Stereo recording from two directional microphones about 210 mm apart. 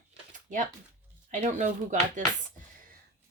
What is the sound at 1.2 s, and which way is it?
Speech, 35° right (ahead or behind).